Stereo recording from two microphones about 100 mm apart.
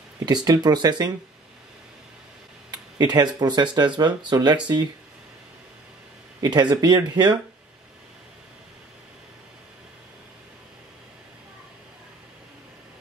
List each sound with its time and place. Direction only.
0.2 s speech: 45° right (ahead or behind)
3.0 s speech: 45° right (ahead or behind)
6.4 s speech: 45° right (ahead or behind)